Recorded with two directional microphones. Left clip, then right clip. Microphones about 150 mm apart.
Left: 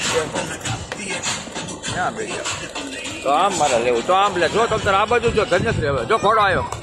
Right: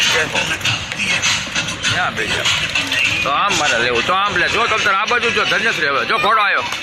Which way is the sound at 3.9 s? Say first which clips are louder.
Right 1 dB; 10° left (ahead or behind).